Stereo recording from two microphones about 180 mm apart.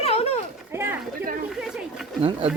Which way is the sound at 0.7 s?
15° right (ahead or behind).